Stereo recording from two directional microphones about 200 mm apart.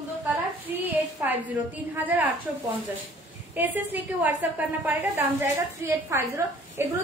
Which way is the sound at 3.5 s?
10° right (ahead or behind).